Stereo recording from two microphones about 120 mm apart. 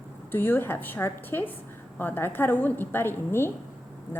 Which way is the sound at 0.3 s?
15° left (ahead or behind).